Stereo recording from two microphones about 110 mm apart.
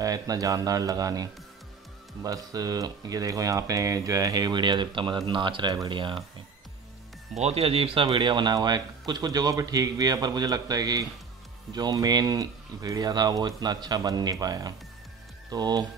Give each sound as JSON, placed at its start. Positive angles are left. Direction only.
{"t": 0.0, "sound": "speech", "side_deg": -35}
{"t": 7.3, "sound": "speech", "side_deg": -70}
{"t": 8.1, "sound": "speech", "side_deg": -45}